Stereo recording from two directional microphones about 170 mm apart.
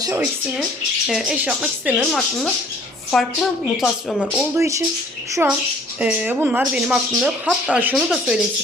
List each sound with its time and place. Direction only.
1.0 s speech: 5° right (ahead or behind)
3.1 s speech: centre (ahead or behind)
4.4 s speech: 15° right (ahead or behind)